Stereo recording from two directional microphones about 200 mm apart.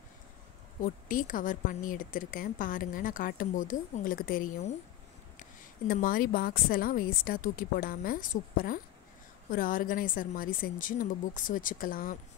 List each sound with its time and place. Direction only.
0.8 s a woman's voice: 45° left (ahead or behind)
5.9 s a woman's voice: 45° left (ahead or behind)